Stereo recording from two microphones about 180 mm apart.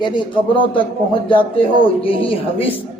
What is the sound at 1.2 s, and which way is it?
A man's voice, 30° left (ahead or behind).